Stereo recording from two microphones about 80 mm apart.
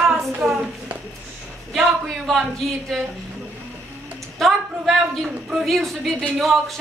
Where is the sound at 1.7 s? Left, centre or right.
Centre.